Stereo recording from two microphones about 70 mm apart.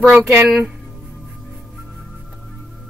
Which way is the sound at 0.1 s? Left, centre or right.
Right.